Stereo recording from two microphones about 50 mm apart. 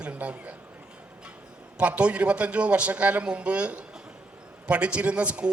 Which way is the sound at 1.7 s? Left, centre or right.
Right.